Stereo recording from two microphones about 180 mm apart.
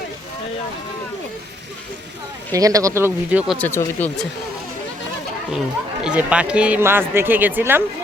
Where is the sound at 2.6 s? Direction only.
20° right (ahead or behind).